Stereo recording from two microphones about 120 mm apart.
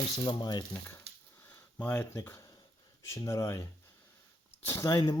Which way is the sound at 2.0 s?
25° left (ahead or behind).